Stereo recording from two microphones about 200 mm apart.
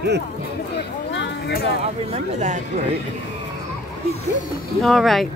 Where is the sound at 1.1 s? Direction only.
60° left (ahead or behind).